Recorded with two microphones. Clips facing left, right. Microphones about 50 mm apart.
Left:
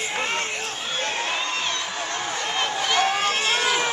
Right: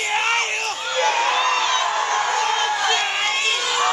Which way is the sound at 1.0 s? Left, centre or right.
Right.